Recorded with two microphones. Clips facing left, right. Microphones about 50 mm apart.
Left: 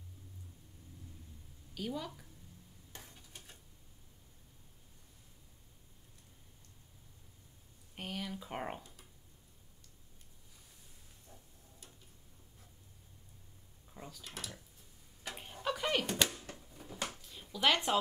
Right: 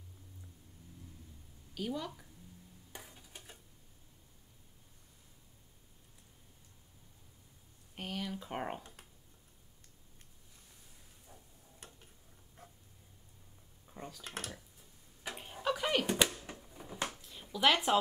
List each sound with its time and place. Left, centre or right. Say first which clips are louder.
1.8 s a woman's voice: right 2 dB; centre
2.9 s stir: right 2 dB; centre
7.9 s speech: right 2 dB; centre
11.8 s tick-tock: right 5 dB; right
13.9 s drawer open or close: right 3 dB; centre
14.2 s speech: right 4 dB; right
15.2 s tick-tock: right 2 dB; centre
15.6 s a sound: right 2 dB; centre